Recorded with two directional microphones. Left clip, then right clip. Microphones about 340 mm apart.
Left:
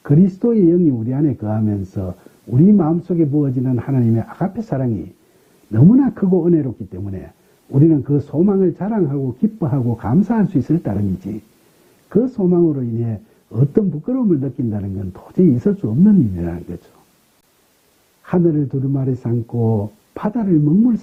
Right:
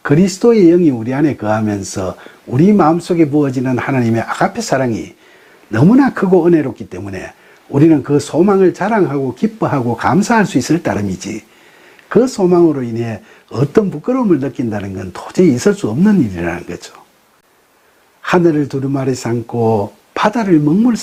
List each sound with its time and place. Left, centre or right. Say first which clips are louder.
0.0 s speech: right 6 dB; centre
18.2 s speech: right 6 dB; centre
20.1 s speech: right 7 dB; centre